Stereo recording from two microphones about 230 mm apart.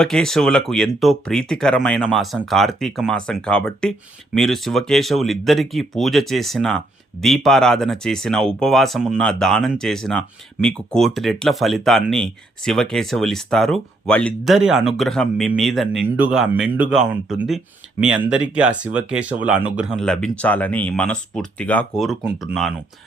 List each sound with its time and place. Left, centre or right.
0.0 s speech: centre